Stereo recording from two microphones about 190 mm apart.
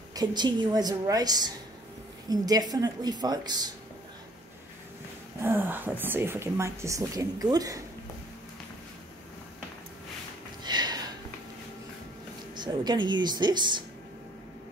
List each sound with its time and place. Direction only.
0.1 s a woman's voice: 20° right (ahead or behind)
5.4 s a woman's voice: 10° right (ahead or behind)
10.6 s a sound: 20° right (ahead or behind)
12.5 s a woman's voice: 25° right (ahead or behind)